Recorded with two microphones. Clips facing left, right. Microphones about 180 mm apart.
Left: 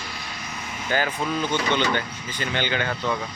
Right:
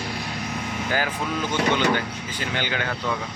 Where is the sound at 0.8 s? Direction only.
5° right (ahead or behind).